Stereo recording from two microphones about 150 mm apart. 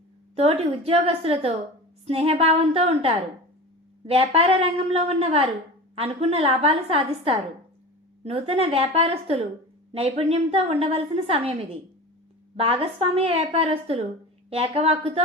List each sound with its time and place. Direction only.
0.3 s a woman's voice: 40° right (ahead or behind)